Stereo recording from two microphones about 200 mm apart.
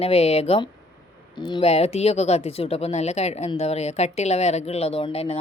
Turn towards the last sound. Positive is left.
turn(degrees=30)  # may be behind; listen again after turning